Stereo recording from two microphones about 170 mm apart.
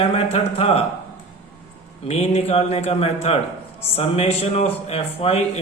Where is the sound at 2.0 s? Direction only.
40° left (ahead or behind).